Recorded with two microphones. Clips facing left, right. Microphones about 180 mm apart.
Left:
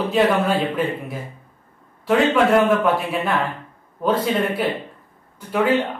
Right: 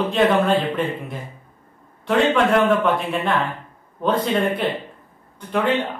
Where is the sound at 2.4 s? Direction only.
5° left (ahead or behind).